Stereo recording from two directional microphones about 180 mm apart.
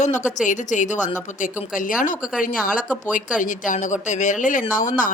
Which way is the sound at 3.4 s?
45° left (ahead or behind).